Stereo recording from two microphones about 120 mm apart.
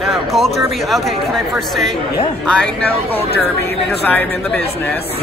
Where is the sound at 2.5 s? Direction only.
10° left (ahead or behind).